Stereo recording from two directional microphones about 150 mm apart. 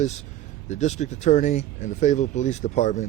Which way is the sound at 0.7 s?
50° left (ahead or behind).